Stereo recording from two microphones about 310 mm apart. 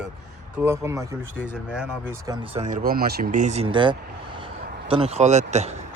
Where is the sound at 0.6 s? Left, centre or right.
Centre.